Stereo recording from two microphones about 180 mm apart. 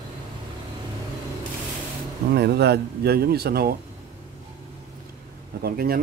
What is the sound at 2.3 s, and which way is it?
Speech, 65° right (ahead or behind).